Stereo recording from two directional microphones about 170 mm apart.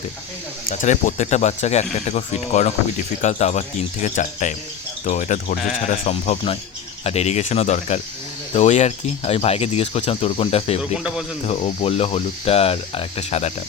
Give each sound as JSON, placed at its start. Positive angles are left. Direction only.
{"t": 0.7, "sound": "speech", "side_deg": 45}
{"t": 10.9, "sound": "speech", "side_deg": -5}
{"t": 11.4, "sound": "speech", "side_deg": 35}